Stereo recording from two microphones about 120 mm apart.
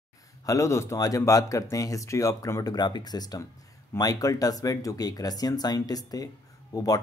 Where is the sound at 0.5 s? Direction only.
25° left (ahead or behind).